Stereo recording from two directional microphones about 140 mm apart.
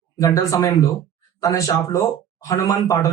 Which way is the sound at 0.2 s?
25° left (ahead or behind).